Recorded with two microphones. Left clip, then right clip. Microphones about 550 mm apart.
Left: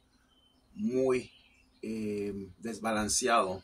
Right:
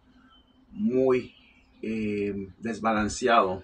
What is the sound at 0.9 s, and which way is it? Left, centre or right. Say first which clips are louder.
Speech: right 6 dB; left.